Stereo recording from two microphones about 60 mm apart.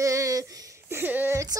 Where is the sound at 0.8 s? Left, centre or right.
Right.